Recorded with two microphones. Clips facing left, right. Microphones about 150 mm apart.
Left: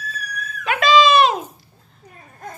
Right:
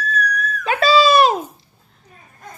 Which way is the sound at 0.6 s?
35° right (ahead or behind).